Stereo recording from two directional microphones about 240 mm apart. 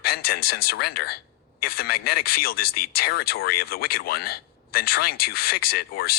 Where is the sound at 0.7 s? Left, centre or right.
Left.